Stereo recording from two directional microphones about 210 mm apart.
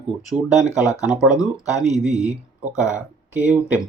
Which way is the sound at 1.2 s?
15° left (ahead or behind).